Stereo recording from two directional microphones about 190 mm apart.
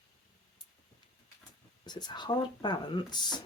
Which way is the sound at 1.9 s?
20° left (ahead or behind).